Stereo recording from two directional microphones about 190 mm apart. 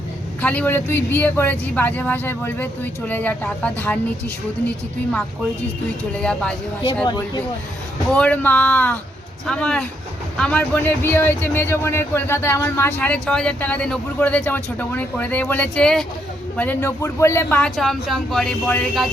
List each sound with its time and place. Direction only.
0.4 s speech: 10° left (ahead or behind)
6.1 s speech: 5° left (ahead or behind)
7.0 s speech: 25° left (ahead or behind)
8.1 s speech: 5° left (ahead or behind)